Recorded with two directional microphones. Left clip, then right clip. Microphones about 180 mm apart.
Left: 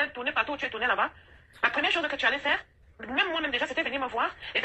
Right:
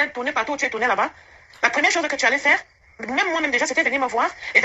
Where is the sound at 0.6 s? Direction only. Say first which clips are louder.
Right 8 dB; 35° right (ahead or behind).